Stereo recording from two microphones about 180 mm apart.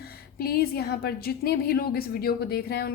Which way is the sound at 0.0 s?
55° left (ahead or behind).